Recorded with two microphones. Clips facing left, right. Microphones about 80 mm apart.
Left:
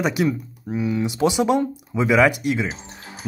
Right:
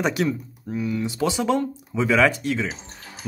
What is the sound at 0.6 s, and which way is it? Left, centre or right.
Speech, centre.